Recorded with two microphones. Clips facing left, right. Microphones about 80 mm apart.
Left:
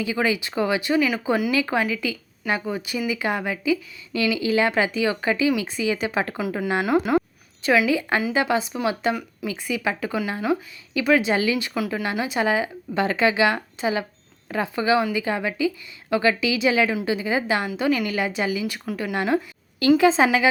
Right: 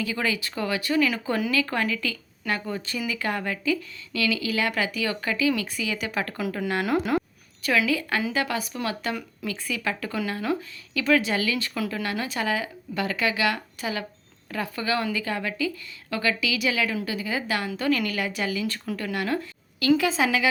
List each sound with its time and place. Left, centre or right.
0.0 s speech: centre
6.8 s speech: centre
7.9 s speech: left
9.1 s speech: centre
9.6 s speech: centre
18.6 s speech: centre
18.9 s speech: left